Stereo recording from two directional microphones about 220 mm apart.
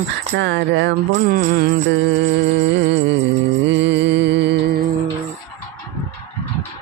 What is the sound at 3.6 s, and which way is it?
Music, 55° right (ahead or behind).